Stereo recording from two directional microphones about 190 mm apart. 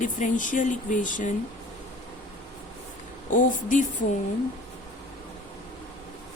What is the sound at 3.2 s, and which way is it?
Speech, 45° left (ahead or behind).